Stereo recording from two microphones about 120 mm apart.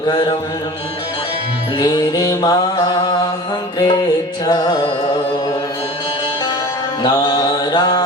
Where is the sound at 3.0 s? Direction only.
40° left (ahead or behind).